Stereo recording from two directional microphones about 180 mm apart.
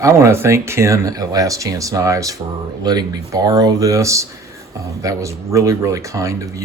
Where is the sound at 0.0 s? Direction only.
15° right (ahead or behind).